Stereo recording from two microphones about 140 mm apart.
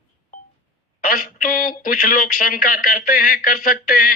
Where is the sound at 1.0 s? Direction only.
90° left.